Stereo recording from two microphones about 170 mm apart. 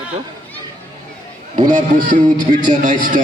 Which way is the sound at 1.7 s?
50° right (ahead or behind).